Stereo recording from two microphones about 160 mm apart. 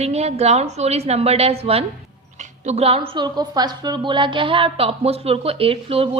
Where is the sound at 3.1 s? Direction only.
25° right (ahead or behind).